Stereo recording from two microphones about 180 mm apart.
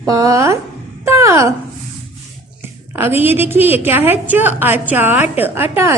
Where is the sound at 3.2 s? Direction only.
10° right (ahead or behind).